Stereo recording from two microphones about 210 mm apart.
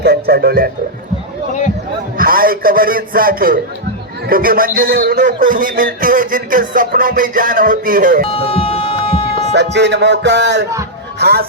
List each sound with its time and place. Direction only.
0.0 s speech: 50° right (ahead or behind)
2.1 s a man's voice: 45° right (ahead or behind)
8.3 s music: 25° left (ahead or behind)
9.7 s music: 55° right (ahead or behind)
11.2 s a man's voice: 50° right (ahead or behind)